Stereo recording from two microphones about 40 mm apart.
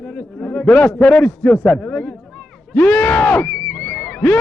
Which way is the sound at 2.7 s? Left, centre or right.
Left.